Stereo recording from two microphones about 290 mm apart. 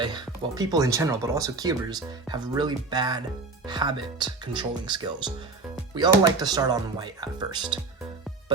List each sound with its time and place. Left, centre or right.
0.0 s speech: centre